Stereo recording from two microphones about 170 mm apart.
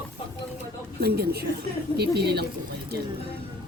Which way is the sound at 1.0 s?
65° right (ahead or behind).